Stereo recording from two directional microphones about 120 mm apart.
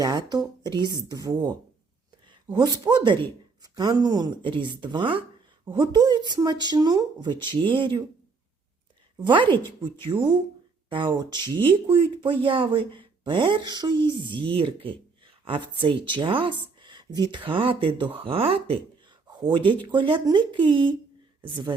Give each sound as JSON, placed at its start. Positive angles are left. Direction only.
{"t": 0.0, "sound": "a woman's voice", "side_deg": -35}
{"t": 9.1, "sound": "a man's voice", "side_deg": -40}
{"t": 19.4, "sound": "a man's voice", "side_deg": -40}